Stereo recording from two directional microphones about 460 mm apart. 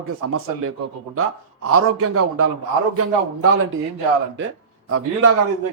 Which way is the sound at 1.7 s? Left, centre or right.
Right.